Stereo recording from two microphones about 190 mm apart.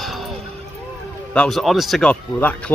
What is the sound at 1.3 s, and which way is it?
Speech, 5° left (ahead or behind).